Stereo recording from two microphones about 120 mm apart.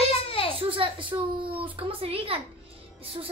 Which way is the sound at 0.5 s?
50° right (ahead or behind).